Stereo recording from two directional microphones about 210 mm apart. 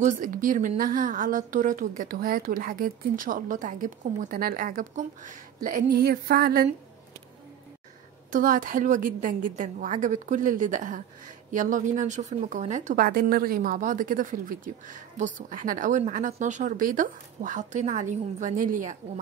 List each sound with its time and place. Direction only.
0.0 s a woman's voice: 40° right (ahead or behind)
8.3 s a woman's voice: 40° right (ahead or behind)